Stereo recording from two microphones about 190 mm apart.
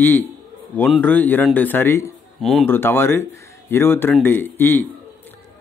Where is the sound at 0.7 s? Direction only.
5° left (ahead or behind).